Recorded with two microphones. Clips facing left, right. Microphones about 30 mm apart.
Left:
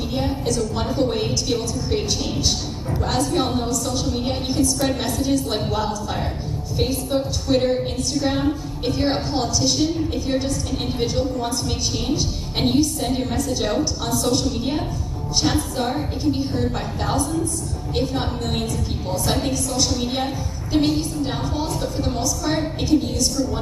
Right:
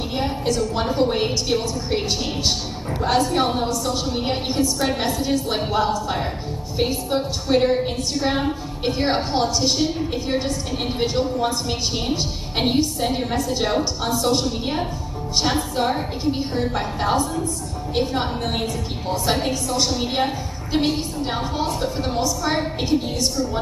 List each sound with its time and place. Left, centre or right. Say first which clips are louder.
0.1 s a woman's voice: right 1 dB; centre